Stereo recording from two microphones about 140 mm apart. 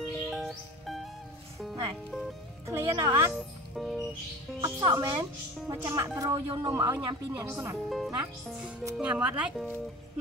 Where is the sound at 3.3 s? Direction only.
Centre (ahead or behind).